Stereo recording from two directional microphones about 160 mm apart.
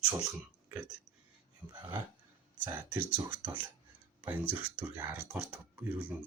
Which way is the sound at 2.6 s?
10° right (ahead or behind).